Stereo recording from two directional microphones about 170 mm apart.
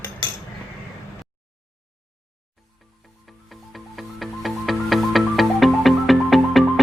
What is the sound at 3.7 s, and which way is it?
Music, centre (ahead or behind).